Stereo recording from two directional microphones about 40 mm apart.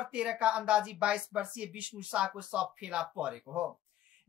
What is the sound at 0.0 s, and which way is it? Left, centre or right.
Speech, right.